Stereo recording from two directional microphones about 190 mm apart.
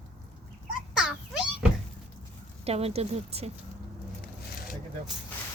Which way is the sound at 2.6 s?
30° right (ahead or behind).